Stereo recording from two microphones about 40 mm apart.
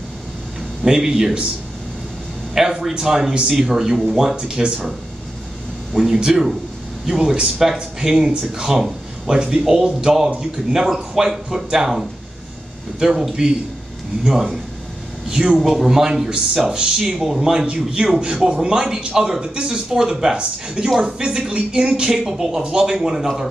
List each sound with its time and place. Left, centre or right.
0.8 s speech: centre
2.5 s speech: centre
5.9 s speech: centre
15.2 s speech: centre
15.5 s speech: centre
20.3 s speech: right